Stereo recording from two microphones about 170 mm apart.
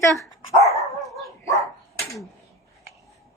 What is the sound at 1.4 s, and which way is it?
Dog, 20° left (ahead or behind).